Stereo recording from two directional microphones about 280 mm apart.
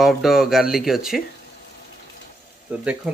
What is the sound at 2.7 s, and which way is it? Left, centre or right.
Speech, centre.